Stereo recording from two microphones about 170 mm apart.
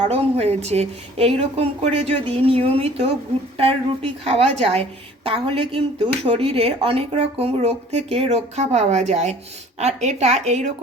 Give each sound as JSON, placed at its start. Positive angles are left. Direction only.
{"t": 0.1, "sound": "a woman's voice", "side_deg": -35}